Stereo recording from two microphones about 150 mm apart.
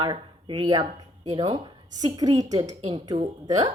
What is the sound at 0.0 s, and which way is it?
A woman's voice, 30° right (ahead or behind).